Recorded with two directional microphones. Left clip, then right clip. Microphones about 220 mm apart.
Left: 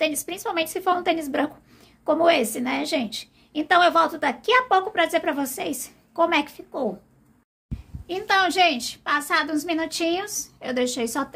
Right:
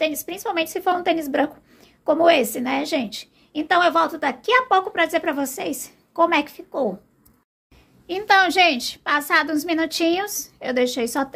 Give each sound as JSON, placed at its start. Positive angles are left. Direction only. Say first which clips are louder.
{"t": 0.0, "sound": "a woman's voice", "louder": "right 1 dB", "side_deg": 0}
{"t": 8.1, "sound": "a woman's voice", "louder": "right 4 dB", "side_deg": -15}